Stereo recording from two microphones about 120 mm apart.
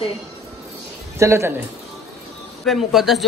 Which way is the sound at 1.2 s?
25° right (ahead or behind).